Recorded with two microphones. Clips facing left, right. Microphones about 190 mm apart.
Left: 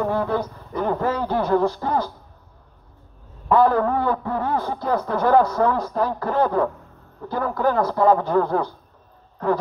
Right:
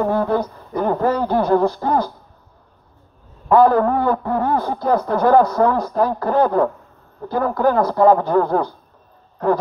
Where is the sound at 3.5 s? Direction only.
45° right (ahead or behind).